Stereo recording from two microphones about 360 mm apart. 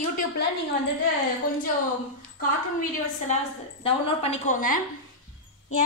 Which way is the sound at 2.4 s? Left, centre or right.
Left.